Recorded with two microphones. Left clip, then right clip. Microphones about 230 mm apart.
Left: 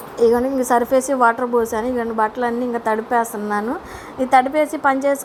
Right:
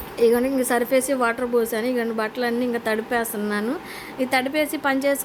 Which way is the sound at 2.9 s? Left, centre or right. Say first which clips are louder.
Left 5 dB; right.